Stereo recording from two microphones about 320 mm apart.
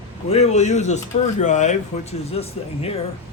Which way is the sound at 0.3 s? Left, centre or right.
Centre.